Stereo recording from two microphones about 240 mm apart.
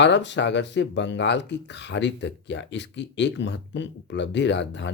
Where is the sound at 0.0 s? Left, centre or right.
Left.